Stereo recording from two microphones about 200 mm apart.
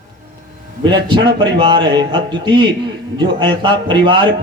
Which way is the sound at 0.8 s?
25° right (ahead or behind).